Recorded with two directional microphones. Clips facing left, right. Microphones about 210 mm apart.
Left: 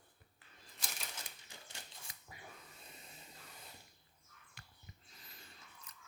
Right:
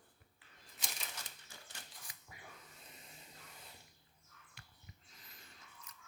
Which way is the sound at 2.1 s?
35° left (ahead or behind).